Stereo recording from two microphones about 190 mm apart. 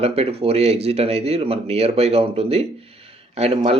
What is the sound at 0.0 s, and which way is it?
Speech, 30° right (ahead or behind).